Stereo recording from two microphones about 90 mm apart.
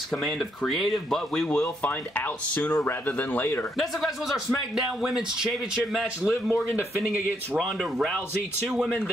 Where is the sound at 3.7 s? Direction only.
Centre (ahead or behind).